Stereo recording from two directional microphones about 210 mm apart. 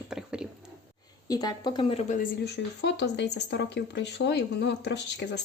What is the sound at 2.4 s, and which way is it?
A woman's voice, 55° left (ahead or behind).